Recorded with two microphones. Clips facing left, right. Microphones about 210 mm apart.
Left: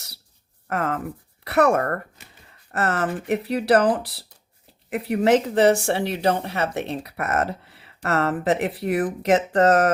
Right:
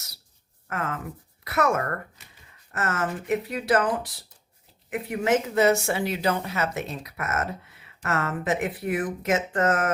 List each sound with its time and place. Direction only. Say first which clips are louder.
0.7 s speech: left 6 dB; 35° left (ahead or behind)
5.1 s speech: left 5 dB; 35° left (ahead or behind)